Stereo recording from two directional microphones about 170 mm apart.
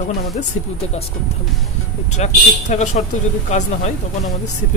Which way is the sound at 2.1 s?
45° left (ahead or behind).